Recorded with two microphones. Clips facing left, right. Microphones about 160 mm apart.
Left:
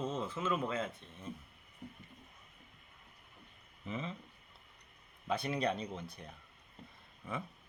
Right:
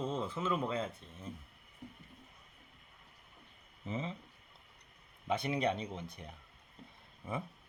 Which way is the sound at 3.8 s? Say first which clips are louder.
Right 2 dB; 30° right (ahead or behind).